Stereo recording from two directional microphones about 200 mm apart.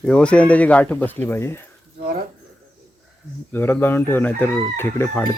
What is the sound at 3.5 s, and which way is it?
Chicken, 10° left (ahead or behind).